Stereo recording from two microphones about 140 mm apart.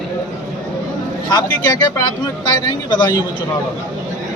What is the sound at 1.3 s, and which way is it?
Speech, 30° left (ahead or behind).